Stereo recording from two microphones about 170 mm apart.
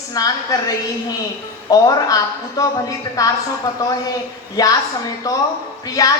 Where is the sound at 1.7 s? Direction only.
20° left (ahead or behind).